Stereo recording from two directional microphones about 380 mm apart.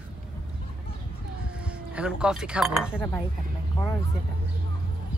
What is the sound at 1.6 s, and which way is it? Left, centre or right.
Speech, centre.